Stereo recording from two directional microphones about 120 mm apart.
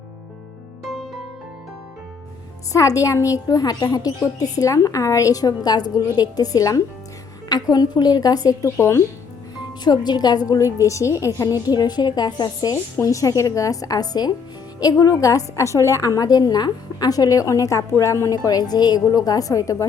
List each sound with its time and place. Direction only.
2.7 s a woman's voice: 25° left (ahead or behind)
9.8 s a woman's voice: 35° left (ahead or behind)